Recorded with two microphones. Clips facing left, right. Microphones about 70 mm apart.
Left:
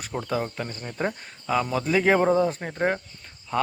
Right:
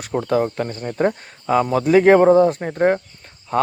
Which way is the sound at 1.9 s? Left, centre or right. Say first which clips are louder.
Right 9 dB; right.